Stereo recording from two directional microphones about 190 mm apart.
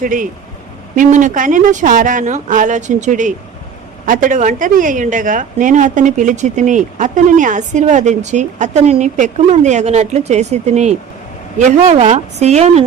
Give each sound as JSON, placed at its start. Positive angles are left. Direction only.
{"t": 0.0, "sound": "speech", "side_deg": -45}